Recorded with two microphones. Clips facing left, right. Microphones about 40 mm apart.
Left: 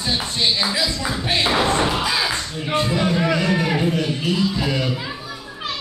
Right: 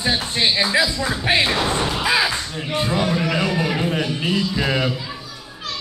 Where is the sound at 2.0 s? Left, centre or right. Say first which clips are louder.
Right 3 dB; centre.